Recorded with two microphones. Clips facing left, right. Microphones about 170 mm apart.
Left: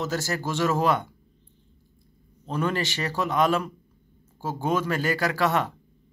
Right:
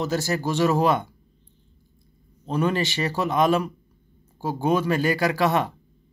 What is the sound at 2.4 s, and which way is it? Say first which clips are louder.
Speech: right 3 dB; 15° right (ahead or behind).